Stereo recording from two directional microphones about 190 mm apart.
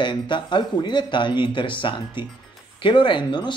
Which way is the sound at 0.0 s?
25° left (ahead or behind).